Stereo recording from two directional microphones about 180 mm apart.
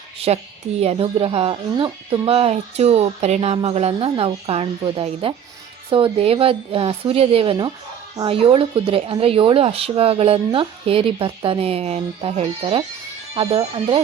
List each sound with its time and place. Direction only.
0.3 s speech: 35° right (ahead or behind)